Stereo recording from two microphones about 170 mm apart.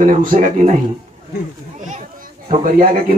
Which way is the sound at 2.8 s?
55° right (ahead or behind).